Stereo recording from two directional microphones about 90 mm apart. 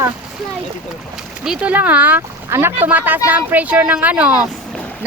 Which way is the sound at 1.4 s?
10° right (ahead or behind).